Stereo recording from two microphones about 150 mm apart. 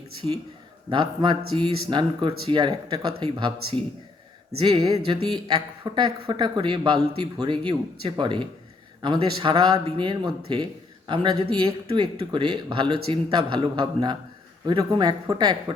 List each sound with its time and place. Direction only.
0.9 s speech: 30° right (ahead or behind)